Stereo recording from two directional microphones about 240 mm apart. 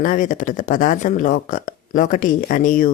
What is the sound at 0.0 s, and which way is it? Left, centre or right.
Speech, left.